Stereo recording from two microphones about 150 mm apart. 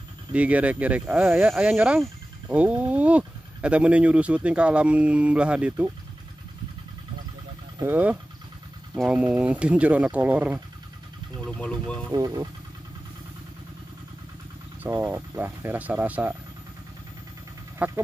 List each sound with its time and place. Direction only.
0.3 s speech: 10° right (ahead or behind)
7.8 s speech: 10° right (ahead or behind)
11.4 s speech: 5° left (ahead or behind)
12.1 s speech: 25° right (ahead or behind)
14.8 s speech: 15° right (ahead or behind)
17.7 s speech: 15° right (ahead or behind)